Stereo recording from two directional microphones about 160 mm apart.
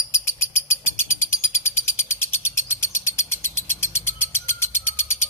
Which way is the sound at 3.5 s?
15° left (ahead or behind).